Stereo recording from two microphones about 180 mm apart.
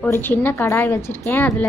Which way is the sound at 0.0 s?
10° left (ahead or behind).